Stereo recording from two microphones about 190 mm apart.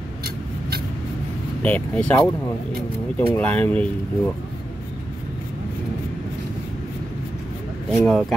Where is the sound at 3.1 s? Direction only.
10° left (ahead or behind).